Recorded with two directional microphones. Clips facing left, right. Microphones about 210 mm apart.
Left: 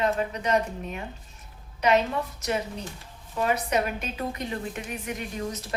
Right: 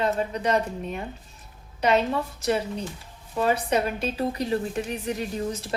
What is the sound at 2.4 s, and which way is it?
A woman's voice, 30° right (ahead or behind).